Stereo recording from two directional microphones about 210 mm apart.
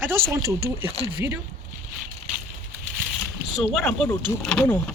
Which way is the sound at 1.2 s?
10° right (ahead or behind).